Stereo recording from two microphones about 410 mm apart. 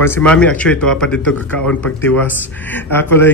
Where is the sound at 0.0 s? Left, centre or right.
Centre.